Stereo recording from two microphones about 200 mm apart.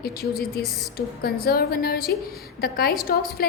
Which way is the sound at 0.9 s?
50° left (ahead or behind).